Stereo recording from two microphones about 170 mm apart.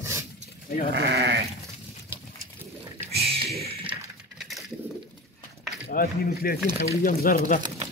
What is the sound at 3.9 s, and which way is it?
Typing, centre (ahead or behind).